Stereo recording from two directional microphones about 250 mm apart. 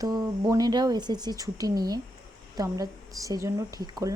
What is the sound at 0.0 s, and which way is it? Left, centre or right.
Speech, centre.